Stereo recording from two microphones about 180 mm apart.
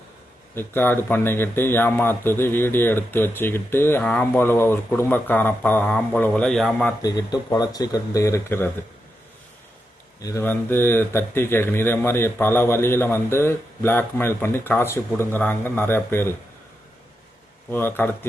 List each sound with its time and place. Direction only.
0.5 s a man's voice: 10° left (ahead or behind)
7.0 s speech: 20° left (ahead or behind)
10.2 s a man's voice: 15° left (ahead or behind)
17.7 s a man's voice: 10° left (ahead or behind)